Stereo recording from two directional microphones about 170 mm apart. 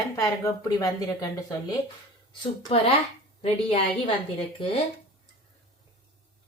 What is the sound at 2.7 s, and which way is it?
A woman's voice, 35° left (ahead or behind).